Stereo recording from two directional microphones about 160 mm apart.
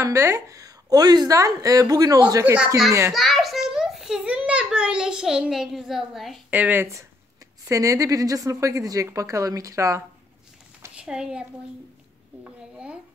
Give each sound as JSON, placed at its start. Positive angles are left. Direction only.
{"t": 0.0, "sound": "a woman's voice", "side_deg": -15}
{"t": 2.4, "sound": "a child's voice", "side_deg": -5}
{"t": 11.0, "sound": "a woman's voice", "side_deg": -5}